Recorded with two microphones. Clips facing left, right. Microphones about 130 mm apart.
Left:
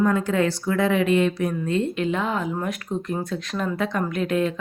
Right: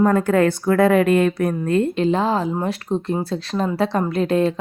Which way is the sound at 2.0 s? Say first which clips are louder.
Right 6 dB; 30° right (ahead or behind).